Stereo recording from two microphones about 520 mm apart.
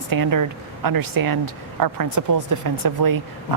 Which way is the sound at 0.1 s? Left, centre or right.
Right.